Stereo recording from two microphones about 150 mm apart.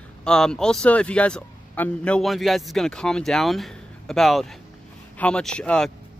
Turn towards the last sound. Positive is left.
turn(degrees=5)  # may be behind; listen again after turning